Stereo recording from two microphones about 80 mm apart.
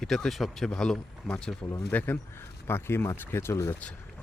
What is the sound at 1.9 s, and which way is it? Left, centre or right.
Speech, left.